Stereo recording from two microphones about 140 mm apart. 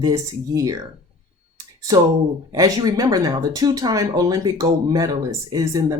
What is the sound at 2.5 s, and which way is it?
Speech, 25° right (ahead or behind).